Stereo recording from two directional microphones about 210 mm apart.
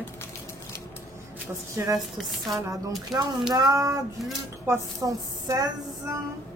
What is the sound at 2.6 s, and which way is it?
A woman's voice, 15° right (ahead or behind).